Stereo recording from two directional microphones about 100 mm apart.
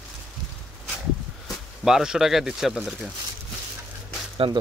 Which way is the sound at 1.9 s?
5° right (ahead or behind).